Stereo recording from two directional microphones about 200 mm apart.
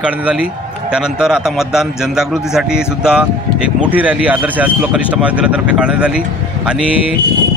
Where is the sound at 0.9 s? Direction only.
5° right (ahead or behind).